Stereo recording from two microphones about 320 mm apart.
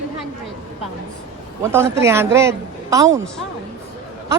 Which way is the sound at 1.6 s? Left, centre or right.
Centre.